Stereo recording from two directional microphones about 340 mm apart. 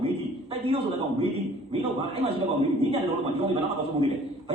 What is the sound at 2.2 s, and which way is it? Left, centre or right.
Speech, centre.